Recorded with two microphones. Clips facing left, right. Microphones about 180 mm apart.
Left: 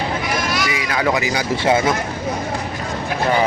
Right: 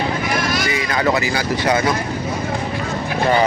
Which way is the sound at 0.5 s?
45° right (ahead or behind).